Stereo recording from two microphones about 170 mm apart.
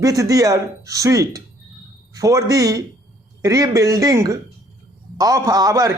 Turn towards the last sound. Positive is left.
turn(degrees=-20)  # may be behind; listen again after turning